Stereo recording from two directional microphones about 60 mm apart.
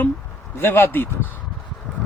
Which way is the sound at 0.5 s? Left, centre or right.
Left.